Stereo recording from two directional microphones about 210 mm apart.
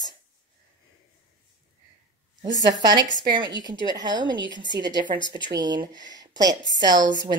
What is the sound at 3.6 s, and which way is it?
A woman's voice, 20° right (ahead or behind).